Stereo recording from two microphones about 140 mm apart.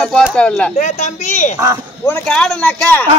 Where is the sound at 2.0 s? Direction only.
10° left (ahead or behind).